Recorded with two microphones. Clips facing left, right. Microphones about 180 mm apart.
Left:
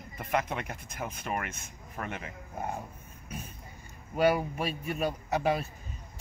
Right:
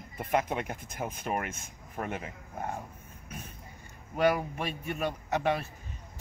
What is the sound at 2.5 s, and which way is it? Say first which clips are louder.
Speech: left 1 dB; 5° left (ahead or behind).